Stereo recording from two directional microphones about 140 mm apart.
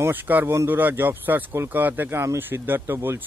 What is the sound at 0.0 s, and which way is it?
Speech, 15° right (ahead or behind).